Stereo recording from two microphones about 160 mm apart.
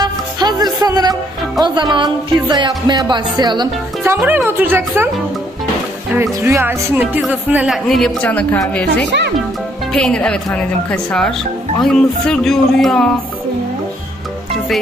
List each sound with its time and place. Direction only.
0.0 s music: 25° right (ahead or behind)
1.6 s speech: 25° right (ahead or behind)
4.0 s a woman's voice: 15° right (ahead or behind); by 13.1 s 5° left (ahead or behind)